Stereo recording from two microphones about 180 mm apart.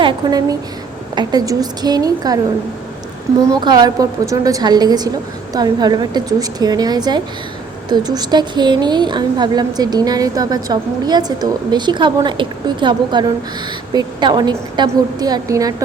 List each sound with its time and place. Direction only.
0.0 s a woman's voice: 25° right (ahead or behind)
3.4 s a woman's voice: 20° right (ahead or behind)